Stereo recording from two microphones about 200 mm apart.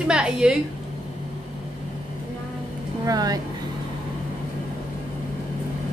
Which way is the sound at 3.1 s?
20° right (ahead or behind).